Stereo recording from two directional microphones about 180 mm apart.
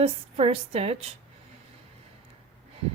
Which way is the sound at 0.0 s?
35° right (ahead or behind).